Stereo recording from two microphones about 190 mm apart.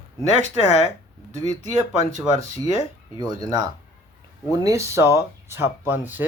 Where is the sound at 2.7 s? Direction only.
30° left (ahead or behind).